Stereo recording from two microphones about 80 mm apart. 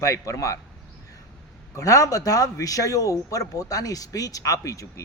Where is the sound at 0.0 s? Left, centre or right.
Left.